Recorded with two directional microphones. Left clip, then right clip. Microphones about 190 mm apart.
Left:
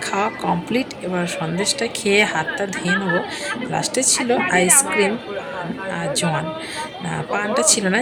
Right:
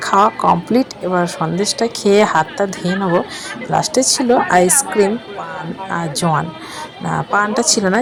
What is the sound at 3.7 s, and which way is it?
Speech, 15° right (ahead or behind).